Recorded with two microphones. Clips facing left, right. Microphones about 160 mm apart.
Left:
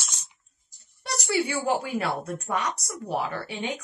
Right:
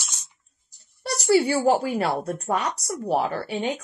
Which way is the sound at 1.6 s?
35° right (ahead or behind).